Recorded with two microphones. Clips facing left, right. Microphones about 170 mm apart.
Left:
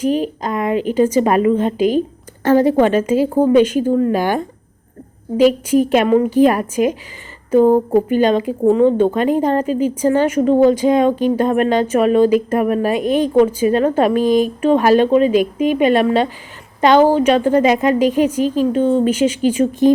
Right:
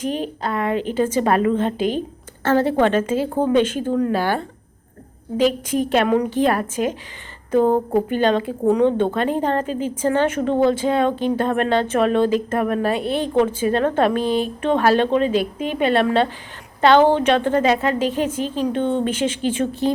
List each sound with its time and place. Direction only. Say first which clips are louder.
0.0 s a woman's voice: left 6 dB; 10° left (ahead or behind)